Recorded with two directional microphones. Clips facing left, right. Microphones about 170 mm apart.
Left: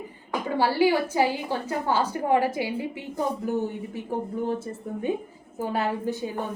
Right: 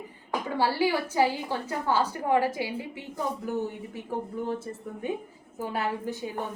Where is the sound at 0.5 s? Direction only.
15° left (ahead or behind).